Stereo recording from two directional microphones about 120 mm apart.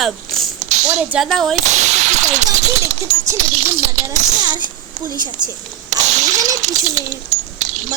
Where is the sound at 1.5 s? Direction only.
80° right.